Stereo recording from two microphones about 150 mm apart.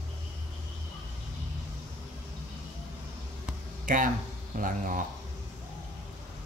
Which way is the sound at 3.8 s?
65° right (ahead or behind).